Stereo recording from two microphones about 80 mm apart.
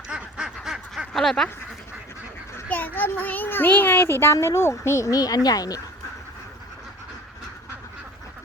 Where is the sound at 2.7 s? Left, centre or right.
Left.